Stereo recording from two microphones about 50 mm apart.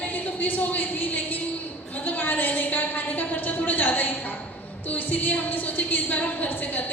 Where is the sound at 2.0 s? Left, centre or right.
Left.